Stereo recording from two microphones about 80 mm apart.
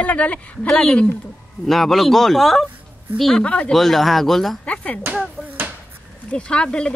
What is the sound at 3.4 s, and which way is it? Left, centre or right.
Speech, centre.